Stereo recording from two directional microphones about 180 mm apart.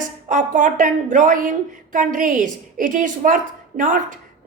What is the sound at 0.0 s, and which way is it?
A woman's voice, 45° right (ahead or behind).